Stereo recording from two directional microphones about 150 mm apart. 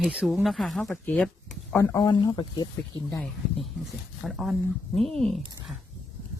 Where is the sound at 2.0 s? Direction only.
30° left (ahead or behind).